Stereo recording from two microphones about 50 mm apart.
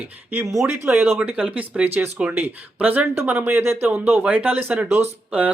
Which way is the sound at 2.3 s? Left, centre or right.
Right.